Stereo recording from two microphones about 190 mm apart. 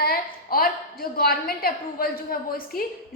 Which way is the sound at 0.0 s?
50° left (ahead or behind).